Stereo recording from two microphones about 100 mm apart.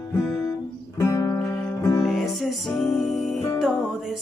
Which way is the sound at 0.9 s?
40° left (ahead or behind).